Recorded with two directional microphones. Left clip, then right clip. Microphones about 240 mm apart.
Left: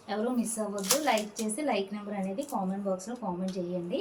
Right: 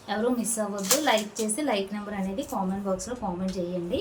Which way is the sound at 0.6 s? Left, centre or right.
Centre.